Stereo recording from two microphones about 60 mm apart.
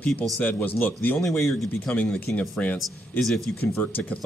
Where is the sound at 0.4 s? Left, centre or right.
Left.